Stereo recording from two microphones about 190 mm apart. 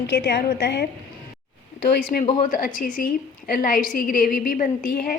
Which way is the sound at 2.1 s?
50° left (ahead or behind).